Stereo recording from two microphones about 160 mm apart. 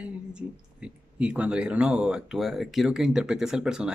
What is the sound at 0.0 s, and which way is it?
Speech, 5° right (ahead or behind).